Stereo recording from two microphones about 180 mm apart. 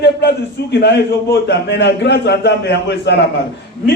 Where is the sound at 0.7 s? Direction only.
75° left (ahead or behind).